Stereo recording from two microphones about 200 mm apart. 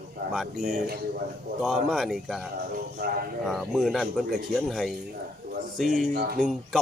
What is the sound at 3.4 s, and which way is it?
Speech, centre (ahead or behind).